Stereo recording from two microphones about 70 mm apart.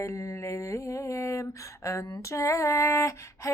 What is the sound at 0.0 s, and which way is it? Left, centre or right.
A woman's voice, left.